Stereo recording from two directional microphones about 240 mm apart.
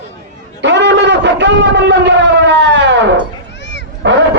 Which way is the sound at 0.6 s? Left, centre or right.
Right.